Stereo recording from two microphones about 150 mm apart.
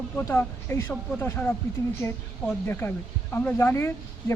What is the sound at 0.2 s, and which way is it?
Speech, 15° left (ahead or behind).